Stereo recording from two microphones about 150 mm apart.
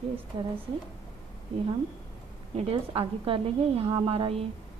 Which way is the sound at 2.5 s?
40° right (ahead or behind).